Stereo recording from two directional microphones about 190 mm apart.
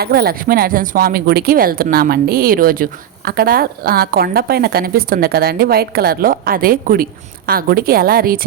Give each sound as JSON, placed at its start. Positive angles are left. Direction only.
{"t": 0.0, "sound": "speech", "side_deg": -55}